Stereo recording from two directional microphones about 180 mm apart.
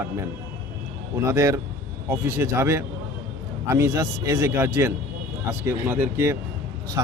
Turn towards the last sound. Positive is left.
turn(degrees=-20)  # may be behind; listen again after turning